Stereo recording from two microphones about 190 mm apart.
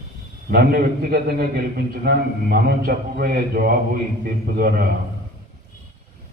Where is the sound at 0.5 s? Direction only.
55° right (ahead or behind).